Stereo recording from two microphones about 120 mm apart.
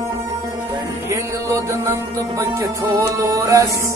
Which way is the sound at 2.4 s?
25° right (ahead or behind).